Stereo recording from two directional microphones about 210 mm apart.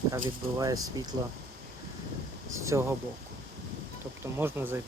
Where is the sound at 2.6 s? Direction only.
15° right (ahead or behind).